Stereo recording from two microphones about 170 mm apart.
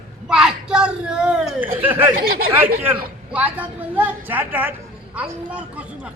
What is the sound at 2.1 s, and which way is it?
Speech, 60° right (ahead or behind).